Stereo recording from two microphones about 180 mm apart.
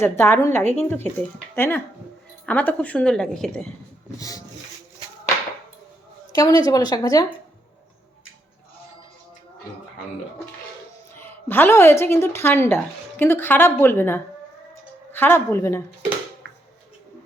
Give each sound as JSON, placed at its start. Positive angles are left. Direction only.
{"t": 0.0, "sound": "a woman's voice", "side_deg": 15}
{"t": 4.2, "sound": "a woman's voice", "side_deg": 20}
{"t": 6.3, "sound": "a woman's voice", "side_deg": 20}
{"t": 11.1, "sound": "a woman's voice", "side_deg": 10}